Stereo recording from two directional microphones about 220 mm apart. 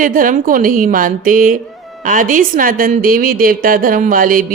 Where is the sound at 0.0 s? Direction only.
40° right (ahead or behind).